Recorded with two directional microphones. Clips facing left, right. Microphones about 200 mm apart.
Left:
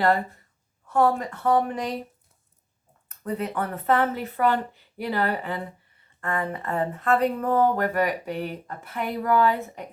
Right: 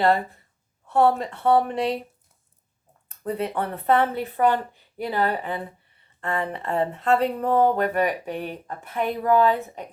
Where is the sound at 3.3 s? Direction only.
25° right (ahead or behind).